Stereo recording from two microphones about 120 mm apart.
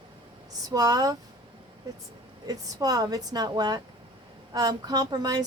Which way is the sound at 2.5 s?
30° right (ahead or behind).